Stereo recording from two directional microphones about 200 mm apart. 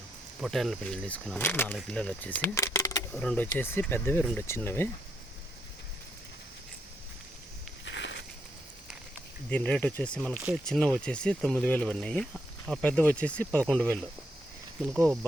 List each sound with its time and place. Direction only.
0.4 s speech: centre (ahead or behind)
7.9 s a sound: 60° left (ahead or behind)
9.5 s speech: 5° left (ahead or behind)